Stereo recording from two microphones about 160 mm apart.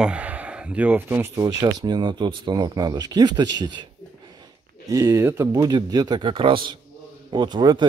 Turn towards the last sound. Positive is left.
turn(degrees=-30)  # may be behind; listen again after turning